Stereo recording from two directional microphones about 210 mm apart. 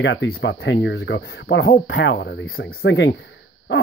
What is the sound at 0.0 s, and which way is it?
Speech, 55° left (ahead or behind).